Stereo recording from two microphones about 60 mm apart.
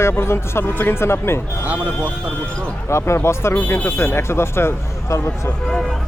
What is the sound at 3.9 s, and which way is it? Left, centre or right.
Speech, left.